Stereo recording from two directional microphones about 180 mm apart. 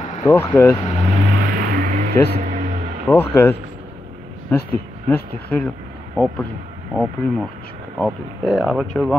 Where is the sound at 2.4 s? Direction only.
45° right (ahead or behind).